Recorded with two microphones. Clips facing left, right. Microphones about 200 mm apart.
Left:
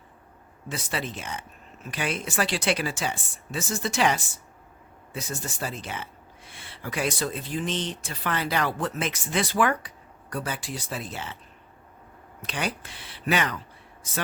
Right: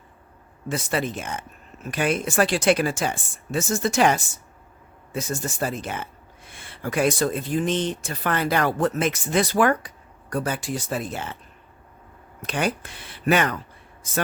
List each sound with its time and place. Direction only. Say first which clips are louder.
0.7 s speech: right 6 dB; 50° right (ahead or behind)
12.4 s speech: right 6 dB; 50° right (ahead or behind)